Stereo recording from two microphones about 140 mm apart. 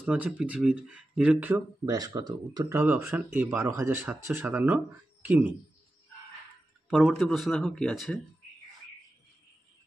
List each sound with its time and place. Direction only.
0.0 s speech: 10° right (ahead or behind)
1.5 s speech: 25° right (ahead or behind)
2.7 s speech: 15° right (ahead or behind)
6.9 s speech: centre (ahead or behind)